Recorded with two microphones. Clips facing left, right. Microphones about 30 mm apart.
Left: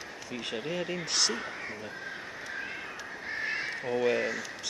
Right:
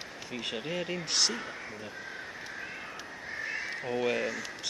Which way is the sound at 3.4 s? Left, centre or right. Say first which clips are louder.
Left 3 dB; left.